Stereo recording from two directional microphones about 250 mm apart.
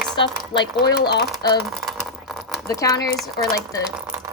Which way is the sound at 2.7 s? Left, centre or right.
Centre.